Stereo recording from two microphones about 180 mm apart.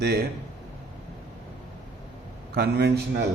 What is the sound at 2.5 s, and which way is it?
Speech, 65° right (ahead or behind).